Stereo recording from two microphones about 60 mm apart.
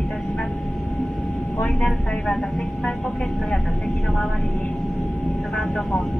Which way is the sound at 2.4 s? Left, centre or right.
Centre.